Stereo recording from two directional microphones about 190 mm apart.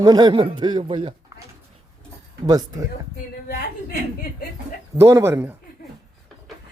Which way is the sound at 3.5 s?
55° left (ahead or behind).